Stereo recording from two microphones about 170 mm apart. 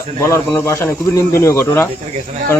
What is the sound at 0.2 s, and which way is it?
Speech, 15° left (ahead or behind).